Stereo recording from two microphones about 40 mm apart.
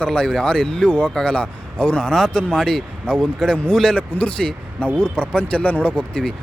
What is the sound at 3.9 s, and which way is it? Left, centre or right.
Speech, left.